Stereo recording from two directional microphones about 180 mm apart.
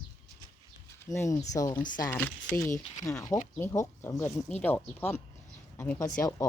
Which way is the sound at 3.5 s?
15° left (ahead or behind).